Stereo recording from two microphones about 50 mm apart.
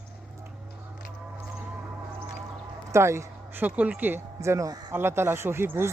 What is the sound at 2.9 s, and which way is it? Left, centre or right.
Speech, right.